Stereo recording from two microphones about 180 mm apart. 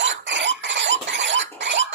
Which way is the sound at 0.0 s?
80° right.